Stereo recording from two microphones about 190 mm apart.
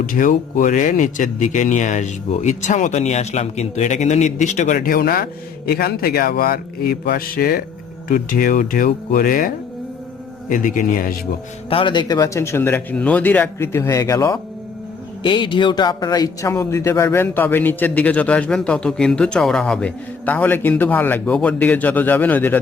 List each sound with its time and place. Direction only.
0.0 s speech: 45° left (ahead or behind)
10.5 s speech: 45° left (ahead or behind)
11.7 s speech: 25° left (ahead or behind); by 22.6 s 10° left (ahead or behind)